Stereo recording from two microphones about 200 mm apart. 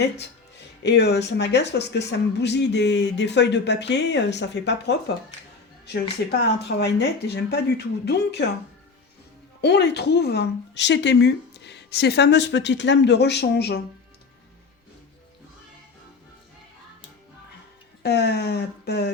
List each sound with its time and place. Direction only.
0.0 s speech: 60° left (ahead or behind)
6.4 s speech: 55° left (ahead or behind)
9.6 s speech: 55° left (ahead or behind)
18.0 s speech: 55° left (ahead or behind)